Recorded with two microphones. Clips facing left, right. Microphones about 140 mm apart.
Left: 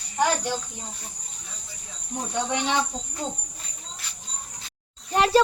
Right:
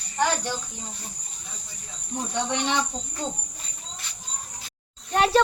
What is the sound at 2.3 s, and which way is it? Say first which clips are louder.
Speech: left 1 dB; 10° left (ahead or behind).